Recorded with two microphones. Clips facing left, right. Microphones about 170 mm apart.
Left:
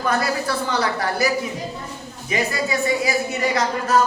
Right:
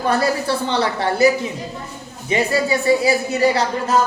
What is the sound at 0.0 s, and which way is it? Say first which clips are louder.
A woman's voice: right 3 dB; 30° right (ahead or behind).